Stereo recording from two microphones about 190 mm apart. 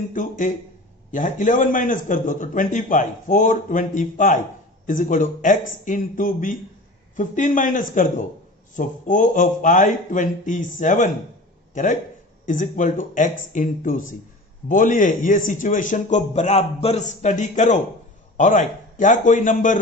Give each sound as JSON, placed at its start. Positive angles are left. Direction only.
{"t": 0.1, "sound": "a man's voice", "side_deg": 45}